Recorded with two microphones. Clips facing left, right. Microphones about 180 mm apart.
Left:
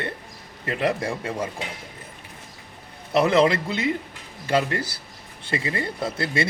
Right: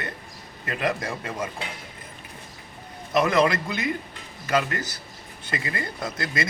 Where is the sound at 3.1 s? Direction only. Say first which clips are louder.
Left 2 dB; 30° left (ahead or behind).